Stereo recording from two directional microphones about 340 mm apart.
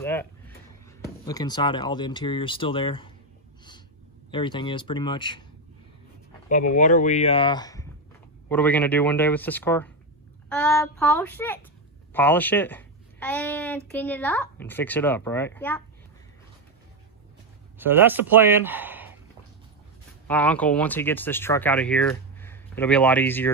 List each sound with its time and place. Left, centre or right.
0.0 s a sound: centre
1.2 s speech: centre
4.3 s speech: centre
6.5 s speech: left; by 15.8 s centre
17.7 s speech: centre
20.2 s speech: centre